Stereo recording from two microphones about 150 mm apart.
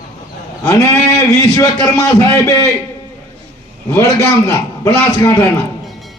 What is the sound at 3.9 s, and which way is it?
A man's voice, 20° left (ahead or behind).